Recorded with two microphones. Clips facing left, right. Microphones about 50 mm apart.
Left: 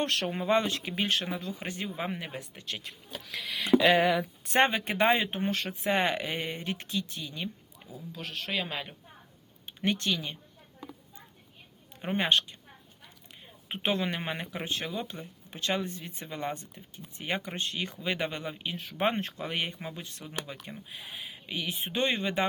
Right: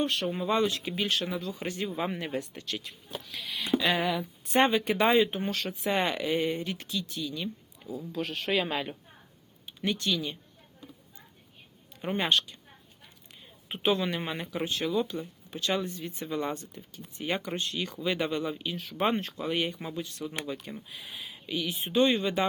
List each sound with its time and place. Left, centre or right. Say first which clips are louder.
0.0 s speech: right 1 dB; left
0.3 s speech: left 1 dB; left
2.0 s speech: right 4 dB; centre
2.4 s speech: right 3 dB; centre
3.2 s speech: left 2 dB; left
3.9 s speech: left 4 dB; left
4.6 s speech: right 1 dB; left
7.9 s speech: right 5 dB; centre
9.6 s speech: even; left
12.0 s speech: even; left
13.7 s speech: right 2 dB; left